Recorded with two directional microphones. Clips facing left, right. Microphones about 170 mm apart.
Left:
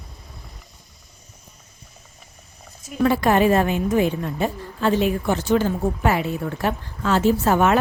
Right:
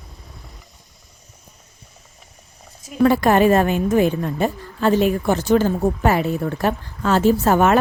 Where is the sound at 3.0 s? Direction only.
45° right (ahead or behind).